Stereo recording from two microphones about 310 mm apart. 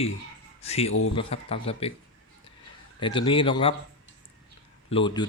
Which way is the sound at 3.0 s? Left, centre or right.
Centre.